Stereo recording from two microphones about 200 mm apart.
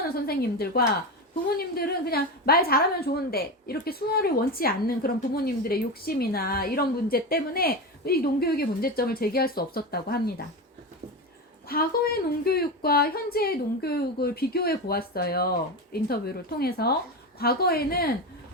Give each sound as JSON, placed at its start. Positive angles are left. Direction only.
{"t": 0.3, "sound": "a woman's voice", "side_deg": 50}
{"t": 11.7, "sound": "a woman's voice", "side_deg": 50}